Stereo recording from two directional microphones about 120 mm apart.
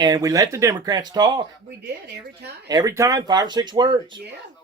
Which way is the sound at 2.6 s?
30° right (ahead or behind).